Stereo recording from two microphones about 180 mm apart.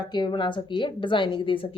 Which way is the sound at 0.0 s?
25° left (ahead or behind).